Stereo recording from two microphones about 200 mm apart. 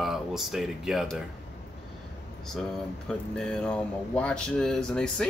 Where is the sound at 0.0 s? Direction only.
Centre (ahead or behind).